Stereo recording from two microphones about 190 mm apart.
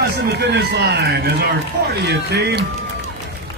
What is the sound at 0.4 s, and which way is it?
A man's voice, 60° right (ahead or behind).